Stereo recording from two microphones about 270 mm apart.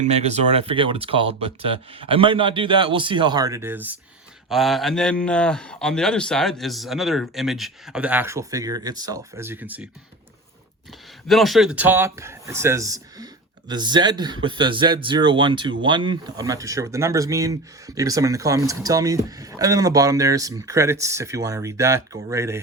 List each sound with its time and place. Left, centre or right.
0.0 s a man's voice: right; by 9.8 s centre
11.3 s speech: centre